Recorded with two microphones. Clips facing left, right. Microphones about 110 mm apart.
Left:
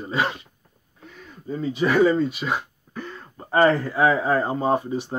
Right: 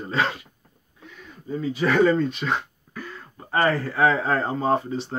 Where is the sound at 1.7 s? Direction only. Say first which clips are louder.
Left 1 dB; 10° left (ahead or behind).